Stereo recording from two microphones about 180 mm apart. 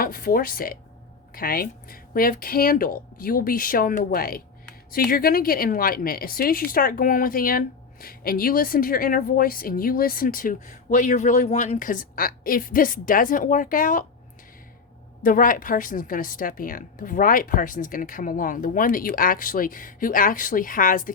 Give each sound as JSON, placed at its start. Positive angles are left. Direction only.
{"t": 0.0, "sound": "a woman's voice", "side_deg": 50}
{"t": 15.2, "sound": "a woman's voice", "side_deg": 50}